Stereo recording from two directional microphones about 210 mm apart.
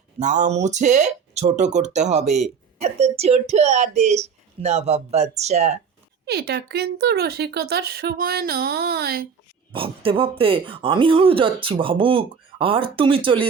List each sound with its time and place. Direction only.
0.2 s speech: 35° right (ahead or behind)
6.2 s speech: 50° right (ahead or behind)
9.7 s speech: 25° right (ahead or behind)